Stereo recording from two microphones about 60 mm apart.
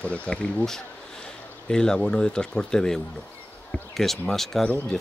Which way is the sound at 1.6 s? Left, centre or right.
Centre.